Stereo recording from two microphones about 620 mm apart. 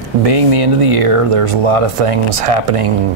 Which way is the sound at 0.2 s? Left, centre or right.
Right.